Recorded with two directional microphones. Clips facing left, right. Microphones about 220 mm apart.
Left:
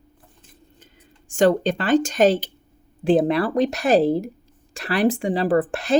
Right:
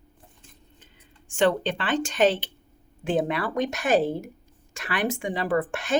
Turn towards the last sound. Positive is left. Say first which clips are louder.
# left 6 dB
turn(degrees=35)  # may be behind; listen again after turning